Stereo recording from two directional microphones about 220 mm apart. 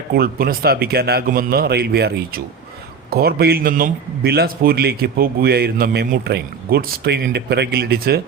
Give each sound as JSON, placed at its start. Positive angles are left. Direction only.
{"t": 0.1, "sound": "a man's voice", "side_deg": -45}